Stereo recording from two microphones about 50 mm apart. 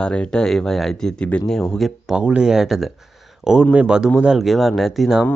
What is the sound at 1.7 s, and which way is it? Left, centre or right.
Speech, centre.